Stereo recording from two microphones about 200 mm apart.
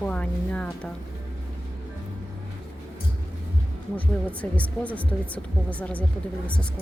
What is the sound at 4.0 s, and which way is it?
Speech, 5° left (ahead or behind).